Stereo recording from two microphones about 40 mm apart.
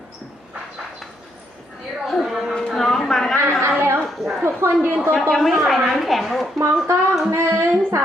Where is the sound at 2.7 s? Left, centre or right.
Centre.